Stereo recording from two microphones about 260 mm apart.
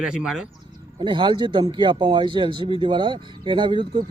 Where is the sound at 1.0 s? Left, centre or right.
Centre.